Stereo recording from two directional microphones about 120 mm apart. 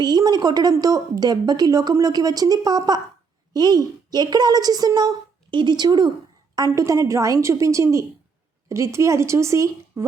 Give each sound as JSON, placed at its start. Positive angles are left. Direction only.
{"t": 0.0, "sound": "a woman's voice", "side_deg": -35}